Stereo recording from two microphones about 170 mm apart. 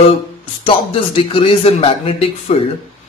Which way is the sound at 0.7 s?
30° left (ahead or behind).